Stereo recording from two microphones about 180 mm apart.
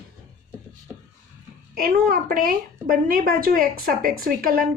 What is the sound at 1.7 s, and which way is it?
A woman's voice, 55° right (ahead or behind).